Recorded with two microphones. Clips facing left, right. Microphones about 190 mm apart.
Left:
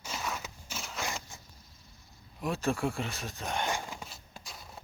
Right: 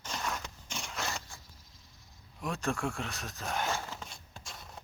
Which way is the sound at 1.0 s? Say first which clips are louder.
Left 2 dB; 15° left (ahead or behind).